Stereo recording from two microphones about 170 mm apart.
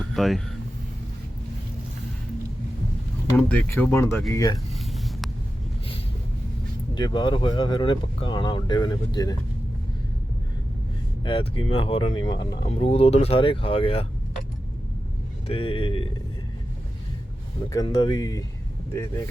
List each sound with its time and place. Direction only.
0.0 s speech: centre (ahead or behind)
3.3 s speech: 10° left (ahead or behind)
4.5 s a sound: centre (ahead or behind)
6.9 s speech: 25° left (ahead or behind)
11.2 s speech: 30° left (ahead or behind)
12.6 s speech: 35° left (ahead or behind)
15.4 s speech: 30° left (ahead or behind)
17.7 s speech: 20° left (ahead or behind)